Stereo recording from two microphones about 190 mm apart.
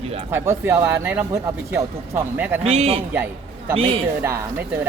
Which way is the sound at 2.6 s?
30° right (ahead or behind).